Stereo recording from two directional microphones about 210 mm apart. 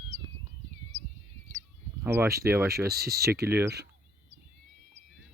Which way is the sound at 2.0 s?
10° right (ahead or behind).